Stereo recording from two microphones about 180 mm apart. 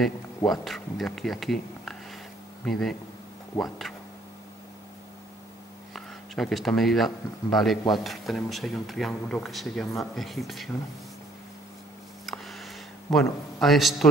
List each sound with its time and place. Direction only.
0.5 s speech: centre (ahead or behind)
3.5 s speech: 15° left (ahead or behind)
5.9 s speech: centre (ahead or behind)
12.3 s a sound: centre (ahead or behind)
13.1 s speech: centre (ahead or behind)